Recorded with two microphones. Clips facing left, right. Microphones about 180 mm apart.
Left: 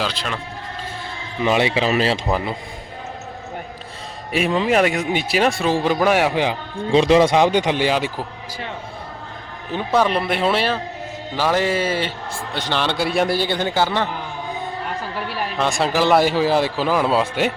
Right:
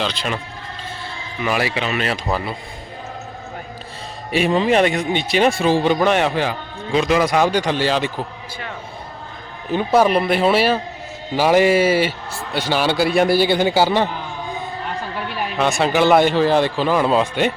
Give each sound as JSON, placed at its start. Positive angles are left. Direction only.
{"t": 0.0, "sound": "speech", "side_deg": 0}
{"t": 1.5, "sound": "speech", "side_deg": 25}
{"t": 4.3, "sound": "a man's voice", "side_deg": 0}
{"t": 6.9, "sound": "speech", "side_deg": 30}
{"t": 9.7, "sound": "a man's voice", "side_deg": -10}
{"t": 15.3, "sound": "speech", "side_deg": 0}